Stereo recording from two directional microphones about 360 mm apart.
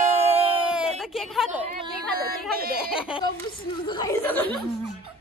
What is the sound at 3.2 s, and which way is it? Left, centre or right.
Chuckle, centre.